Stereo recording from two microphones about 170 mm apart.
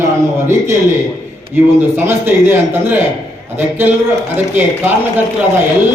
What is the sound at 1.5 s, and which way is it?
Speech, 15° right (ahead or behind).